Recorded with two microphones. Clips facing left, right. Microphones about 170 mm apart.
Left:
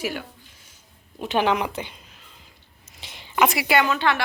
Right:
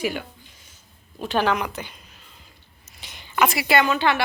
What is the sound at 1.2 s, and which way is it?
Speech, 20° left (ahead or behind).